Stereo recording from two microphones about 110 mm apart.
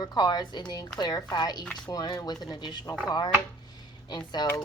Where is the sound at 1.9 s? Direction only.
40° left (ahead or behind).